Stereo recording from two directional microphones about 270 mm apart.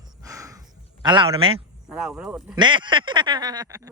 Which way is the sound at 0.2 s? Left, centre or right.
Centre.